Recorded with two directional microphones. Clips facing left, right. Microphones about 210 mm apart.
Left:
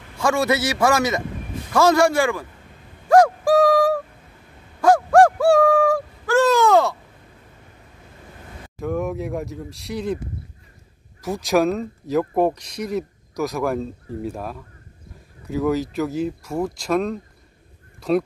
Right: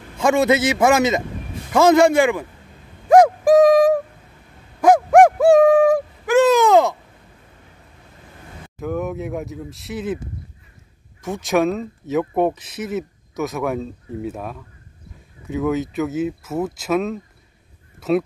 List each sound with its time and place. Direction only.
0.2 s a man's voice: 20° right (ahead or behind)
3.1 s a sound: 20° right (ahead or behind)
4.8 s owl: 20° right (ahead or behind)
8.7 s speech: centre (ahead or behind)
11.1 s speech: centre (ahead or behind)